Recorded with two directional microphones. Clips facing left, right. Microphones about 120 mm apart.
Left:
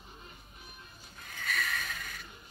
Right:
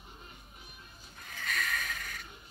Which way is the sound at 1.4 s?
5° left (ahead or behind).